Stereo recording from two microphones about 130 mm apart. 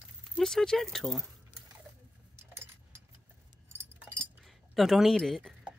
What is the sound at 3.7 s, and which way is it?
Keys jangling, 20° right (ahead or behind).